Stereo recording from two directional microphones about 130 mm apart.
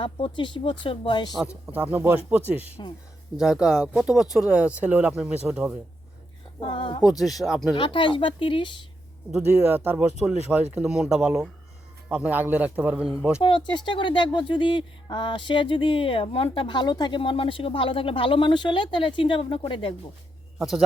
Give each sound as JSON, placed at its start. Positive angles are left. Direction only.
{"t": 0.0, "sound": "speech", "side_deg": 40}
{"t": 1.6, "sound": "speech", "side_deg": -10}
{"t": 2.6, "sound": "speech", "side_deg": 50}
{"t": 3.3, "sound": "speech", "side_deg": -5}
{"t": 6.6, "sound": "speech", "side_deg": 40}
{"t": 7.2, "sound": "speech", "side_deg": 0}
{"t": 7.7, "sound": "speech", "side_deg": 40}
{"t": 9.6, "sound": "speech", "side_deg": -15}
{"t": 13.4, "sound": "speech", "side_deg": 40}